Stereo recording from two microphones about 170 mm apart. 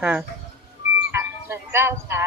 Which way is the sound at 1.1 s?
15° right (ahead or behind).